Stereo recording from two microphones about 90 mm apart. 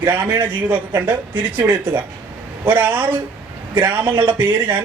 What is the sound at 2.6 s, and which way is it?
Speech, 20° right (ahead or behind).